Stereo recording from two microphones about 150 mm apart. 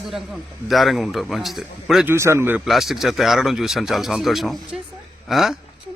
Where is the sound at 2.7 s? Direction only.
Centre (ahead or behind).